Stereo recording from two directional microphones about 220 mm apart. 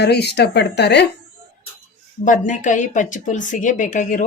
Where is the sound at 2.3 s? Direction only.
35° left (ahead or behind).